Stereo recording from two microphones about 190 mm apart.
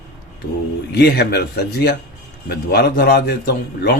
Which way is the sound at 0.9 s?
60° left (ahead or behind).